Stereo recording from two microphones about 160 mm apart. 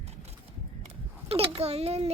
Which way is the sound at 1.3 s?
40° right (ahead or behind).